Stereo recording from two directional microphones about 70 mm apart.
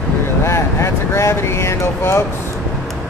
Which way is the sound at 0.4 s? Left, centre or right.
Left.